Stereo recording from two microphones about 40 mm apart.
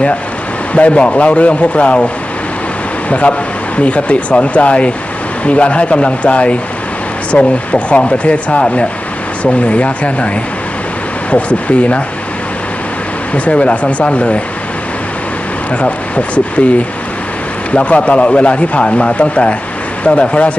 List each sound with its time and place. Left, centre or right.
0.7 s a man's voice: left
3.1 s a man's voice: left
11.3 s a man's voice: left
13.3 s a man's voice: left
15.7 s a man's voice: left
17.8 s a man's voice: left